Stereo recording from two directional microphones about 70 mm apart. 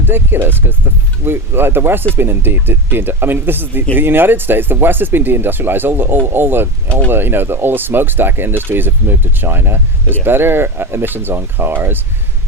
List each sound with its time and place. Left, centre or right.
0.0 s speech: right